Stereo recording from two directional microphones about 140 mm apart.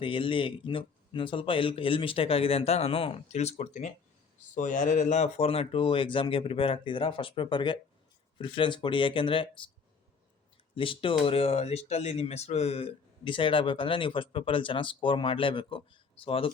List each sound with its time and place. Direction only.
0.0 s speech: 40° left (ahead or behind)
10.8 s speech: 40° left (ahead or behind)